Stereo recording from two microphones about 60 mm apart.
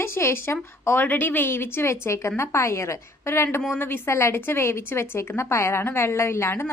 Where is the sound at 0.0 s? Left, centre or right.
Left.